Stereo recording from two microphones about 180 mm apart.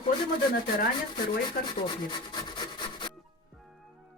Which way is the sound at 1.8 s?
25° left (ahead or behind).